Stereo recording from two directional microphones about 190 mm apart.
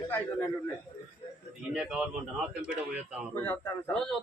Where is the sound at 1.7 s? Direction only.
5° right (ahead or behind).